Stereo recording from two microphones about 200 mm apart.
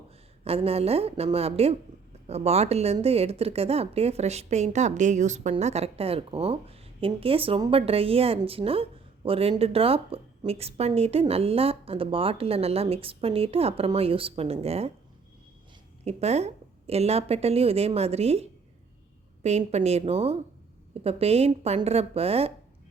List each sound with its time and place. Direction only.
0.4 s a woman's voice: 30° right (ahead or behind)
16.0 s a woman's voice: 35° right (ahead or behind)